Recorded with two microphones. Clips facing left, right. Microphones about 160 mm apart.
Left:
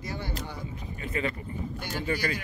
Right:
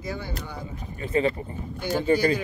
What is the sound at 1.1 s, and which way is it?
Speech, 30° right (ahead or behind).